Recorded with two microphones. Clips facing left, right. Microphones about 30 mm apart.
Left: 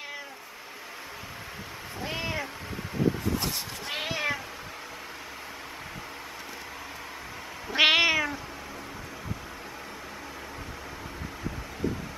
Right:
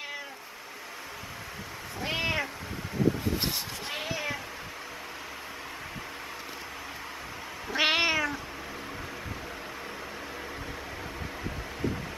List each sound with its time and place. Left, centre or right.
2.0 s cat: right
3.0 s a sound: centre
3.9 s cat: left
7.7 s cat: centre
8.0 s cat: centre